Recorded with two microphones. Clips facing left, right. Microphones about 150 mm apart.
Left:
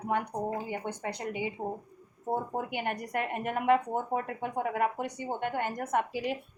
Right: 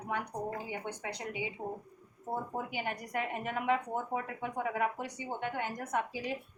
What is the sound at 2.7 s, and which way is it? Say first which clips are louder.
A woman's voice: left 4 dB; 60° left (ahead or behind).